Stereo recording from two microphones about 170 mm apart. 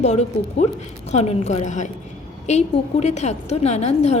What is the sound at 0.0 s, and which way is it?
A woman's voice, 40° left (ahead or behind).